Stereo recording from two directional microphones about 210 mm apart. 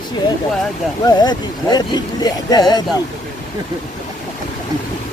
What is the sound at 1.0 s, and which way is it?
Speech, 20° left (ahead or behind).